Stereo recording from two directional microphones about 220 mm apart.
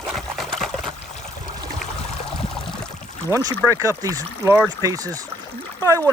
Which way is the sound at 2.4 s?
25° left (ahead or behind).